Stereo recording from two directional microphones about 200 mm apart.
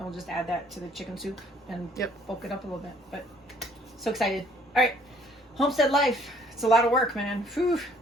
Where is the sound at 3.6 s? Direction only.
Centre (ahead or behind).